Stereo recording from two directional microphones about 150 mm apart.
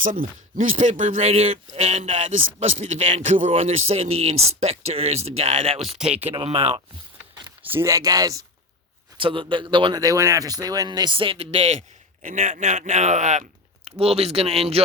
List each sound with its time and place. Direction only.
0.0 s speech: 65° right (ahead or behind); by 6.0 s 40° right (ahead or behind)
6.0 s speech: 10° right (ahead or behind)
6.3 s speech: 40° right (ahead or behind)
7.7 s speech: 20° right (ahead or behind)
9.1 s speech: 35° right (ahead or behind)
12.2 s speech: 55° right (ahead or behind)